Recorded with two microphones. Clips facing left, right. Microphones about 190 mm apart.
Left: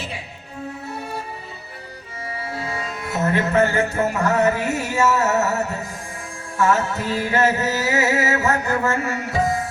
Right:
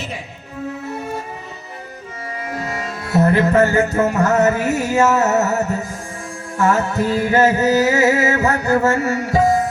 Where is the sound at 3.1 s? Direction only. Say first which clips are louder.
Right 5 dB; 35° right (ahead or behind).